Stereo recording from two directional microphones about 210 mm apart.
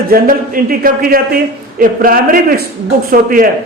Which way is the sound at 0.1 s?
45° right (ahead or behind).